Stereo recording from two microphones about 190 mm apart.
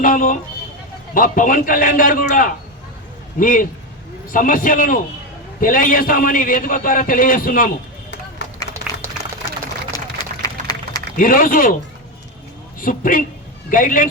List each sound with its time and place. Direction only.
0.0 s a man's voice: 45° left (ahead or behind)
8.9 s a sound: 5° right (ahead or behind)
9.9 s run: 20° left (ahead or behind)
10.4 s a sound: 20° left (ahead or behind)
11.2 s a man's voice: 45° left (ahead or behind)
12.8 s a man's voice: 45° left (ahead or behind)